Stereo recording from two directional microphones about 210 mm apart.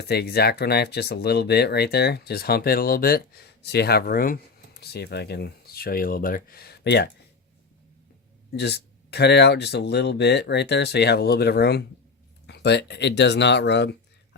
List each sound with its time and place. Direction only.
0.0 s speech: 50° left (ahead or behind)
8.5 s speech: 55° left (ahead or behind)